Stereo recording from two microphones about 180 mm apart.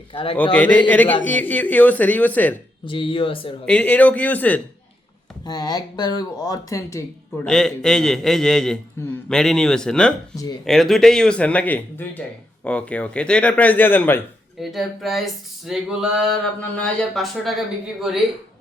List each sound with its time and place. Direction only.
0.1 s a man's voice: 30° left (ahead or behind)
0.5 s a man's voice: 10° left (ahead or behind)
2.8 s speech: 30° left (ahead or behind)
3.7 s a man's voice: 10° left (ahead or behind)
5.5 s speech: 20° left (ahead or behind)
7.4 s speech: 5° left (ahead or behind)
10.3 s speech: 20° left (ahead or behind)
10.7 s a man's voice: centre (ahead or behind)
14.6 s speech: centre (ahead or behind)